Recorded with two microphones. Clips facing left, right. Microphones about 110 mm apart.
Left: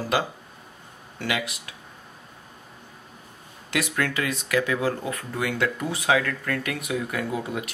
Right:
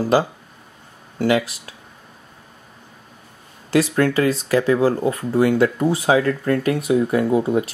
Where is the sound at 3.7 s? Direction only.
35° right (ahead or behind).